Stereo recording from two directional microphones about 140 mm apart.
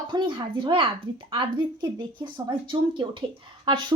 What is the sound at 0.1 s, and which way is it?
Speech, 35° right (ahead or behind).